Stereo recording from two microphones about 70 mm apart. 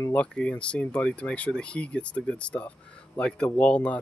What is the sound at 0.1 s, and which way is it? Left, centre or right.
Speech, centre.